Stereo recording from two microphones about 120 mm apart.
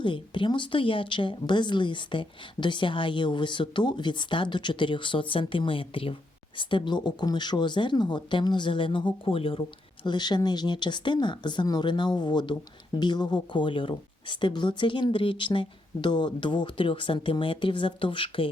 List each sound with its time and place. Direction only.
0.0 s speech: 45° left (ahead or behind)